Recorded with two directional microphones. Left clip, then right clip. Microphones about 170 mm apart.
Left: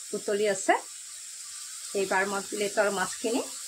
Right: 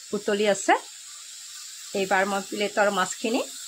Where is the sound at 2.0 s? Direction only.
50° right (ahead or behind).